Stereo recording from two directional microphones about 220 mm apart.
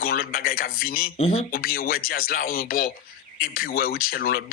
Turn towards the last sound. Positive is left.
turn(degrees=45)  # may be behind; listen again after turning